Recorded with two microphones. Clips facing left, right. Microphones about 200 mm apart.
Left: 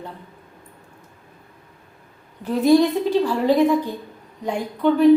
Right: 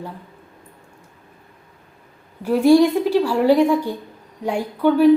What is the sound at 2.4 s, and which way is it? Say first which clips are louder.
A woman's voice: right 3 dB; 10° right (ahead or behind).